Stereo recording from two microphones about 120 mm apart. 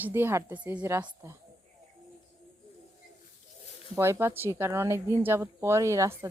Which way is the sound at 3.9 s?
20° right (ahead or behind).